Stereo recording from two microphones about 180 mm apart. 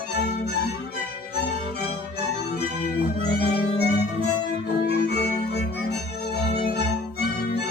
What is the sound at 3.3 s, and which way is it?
Music, 65° left (ahead or behind).